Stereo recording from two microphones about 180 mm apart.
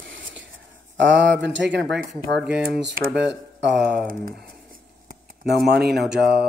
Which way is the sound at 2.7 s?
55° right (ahead or behind).